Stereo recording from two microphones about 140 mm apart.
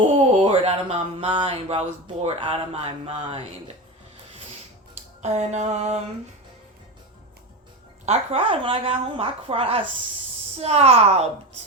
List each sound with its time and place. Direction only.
0.0 s a sound: 45° right (ahead or behind)
2.2 s speech: 40° right (ahead or behind)
4.9 s speech: 50° right (ahead or behind)
8.0 s speech: 50° right (ahead or behind)